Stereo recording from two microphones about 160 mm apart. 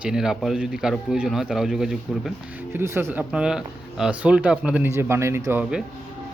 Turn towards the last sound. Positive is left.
turn(degrees=-5)  # may be behind; listen again after turning